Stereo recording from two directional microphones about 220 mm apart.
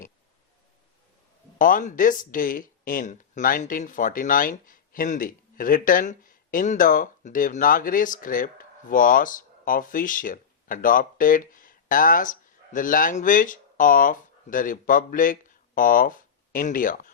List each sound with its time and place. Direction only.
1.5 s speech: 40° left (ahead or behind)